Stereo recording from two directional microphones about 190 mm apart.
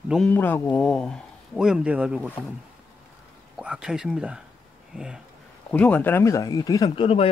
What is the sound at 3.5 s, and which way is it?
Speech, 5° right (ahead or behind).